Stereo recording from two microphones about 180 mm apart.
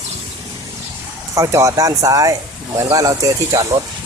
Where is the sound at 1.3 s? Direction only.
15° right (ahead or behind).